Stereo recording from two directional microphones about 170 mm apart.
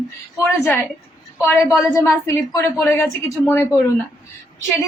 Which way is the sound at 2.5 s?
15° left (ahead or behind).